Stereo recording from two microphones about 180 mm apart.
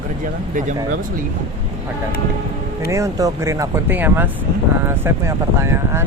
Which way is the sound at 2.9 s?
15° right (ahead or behind).